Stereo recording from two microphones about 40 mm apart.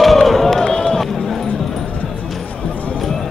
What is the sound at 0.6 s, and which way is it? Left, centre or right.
Run, centre.